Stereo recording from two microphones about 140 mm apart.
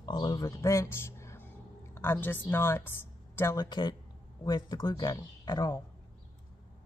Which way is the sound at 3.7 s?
35° left (ahead or behind).